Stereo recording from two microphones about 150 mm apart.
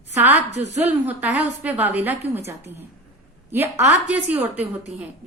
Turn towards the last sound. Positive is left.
turn(degrees=-10)  # may be behind; listen again after turning